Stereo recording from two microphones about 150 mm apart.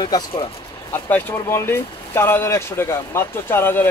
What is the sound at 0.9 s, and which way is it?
Speech, 10° left (ahead or behind).